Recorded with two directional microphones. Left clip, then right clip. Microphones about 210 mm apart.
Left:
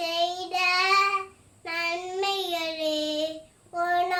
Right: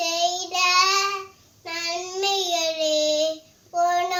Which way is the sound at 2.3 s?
25° left (ahead or behind).